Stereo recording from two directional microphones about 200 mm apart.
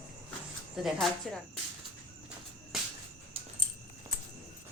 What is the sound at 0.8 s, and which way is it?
Speech, centre (ahead or behind).